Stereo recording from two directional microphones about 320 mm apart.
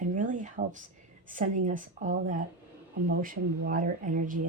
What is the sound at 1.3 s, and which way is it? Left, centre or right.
Speech, right.